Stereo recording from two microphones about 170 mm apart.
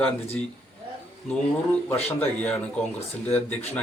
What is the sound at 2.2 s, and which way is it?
Speech, 10° left (ahead or behind).